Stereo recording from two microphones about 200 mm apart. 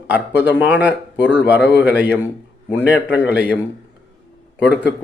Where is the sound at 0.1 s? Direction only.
10° right (ahead or behind).